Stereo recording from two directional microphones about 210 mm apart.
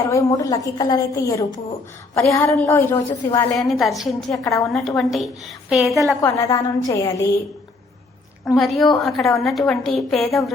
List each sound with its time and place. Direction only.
0.1 s a woman's voice: 15° left (ahead or behind)
3.6 s a woman's voice: centre (ahead or behind)
4.3 s a woman's voice: 15° left (ahead or behind)
4.7 s a woman's voice: centre (ahead or behind)
6.2 s a woman's voice: 15° left (ahead or behind)
8.5 s a woman's voice: centre (ahead or behind)